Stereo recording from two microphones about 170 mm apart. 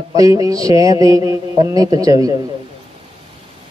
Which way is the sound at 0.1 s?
20° right (ahead or behind).